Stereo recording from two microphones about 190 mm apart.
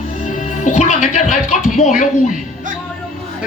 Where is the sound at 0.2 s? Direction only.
40° left (ahead or behind).